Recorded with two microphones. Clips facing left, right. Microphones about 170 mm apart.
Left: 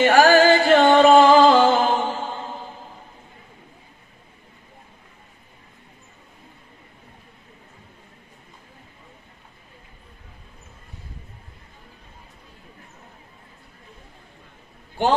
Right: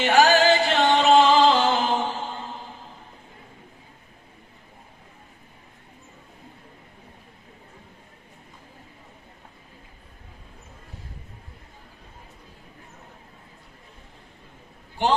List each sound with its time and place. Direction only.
0.0 s music: 50° left (ahead or behind)